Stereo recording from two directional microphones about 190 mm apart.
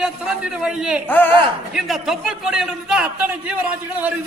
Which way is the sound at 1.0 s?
10° left (ahead or behind).